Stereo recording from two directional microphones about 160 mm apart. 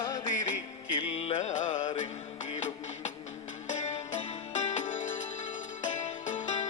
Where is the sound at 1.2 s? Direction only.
45° left (ahead or behind).